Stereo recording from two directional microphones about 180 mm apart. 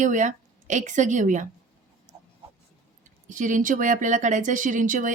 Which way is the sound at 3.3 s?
45° right (ahead or behind).